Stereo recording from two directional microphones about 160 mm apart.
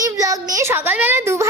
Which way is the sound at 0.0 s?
20° right (ahead or behind).